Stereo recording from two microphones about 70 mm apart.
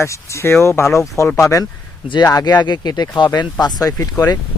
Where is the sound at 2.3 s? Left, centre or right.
Left.